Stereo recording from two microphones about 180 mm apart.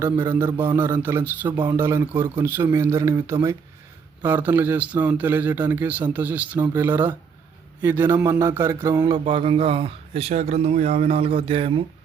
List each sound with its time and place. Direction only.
0.0 s a man's voice: 15° right (ahead or behind); by 11.8 s 30° right (ahead or behind)